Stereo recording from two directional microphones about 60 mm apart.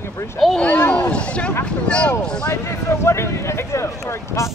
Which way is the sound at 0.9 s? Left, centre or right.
Left.